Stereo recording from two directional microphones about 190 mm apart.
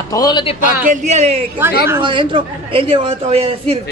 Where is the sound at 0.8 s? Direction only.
35° right (ahead or behind).